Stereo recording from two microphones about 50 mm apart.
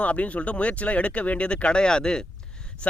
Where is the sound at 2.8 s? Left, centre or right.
Left.